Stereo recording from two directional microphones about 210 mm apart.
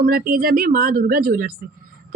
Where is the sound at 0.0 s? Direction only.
45° right (ahead or behind).